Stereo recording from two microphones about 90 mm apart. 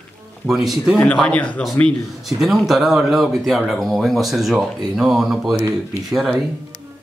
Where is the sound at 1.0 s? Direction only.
15° left (ahead or behind).